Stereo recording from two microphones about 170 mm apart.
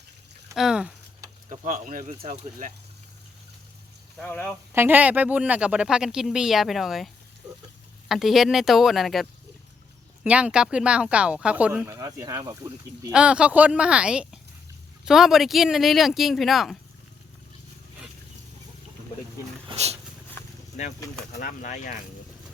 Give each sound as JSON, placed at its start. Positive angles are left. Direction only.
{"t": 0.5, "sound": "speech", "side_deg": -5}
{"t": 1.5, "sound": "speech", "side_deg": -50}
{"t": 4.2, "sound": "speech", "side_deg": 10}
{"t": 4.7, "sound": "speech", "side_deg": -10}
{"t": 10.2, "sound": "speech", "side_deg": -5}
{"t": 19.6, "sound": "dog", "side_deg": -40}
{"t": 21.4, "sound": "speech", "side_deg": 45}